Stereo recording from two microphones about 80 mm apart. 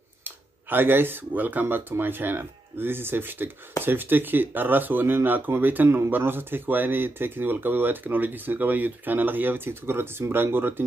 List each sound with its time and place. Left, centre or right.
0.2 s speech: right